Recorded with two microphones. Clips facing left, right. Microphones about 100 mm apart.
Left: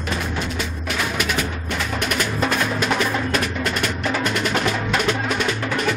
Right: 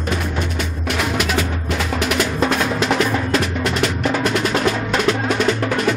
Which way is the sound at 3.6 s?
90° right.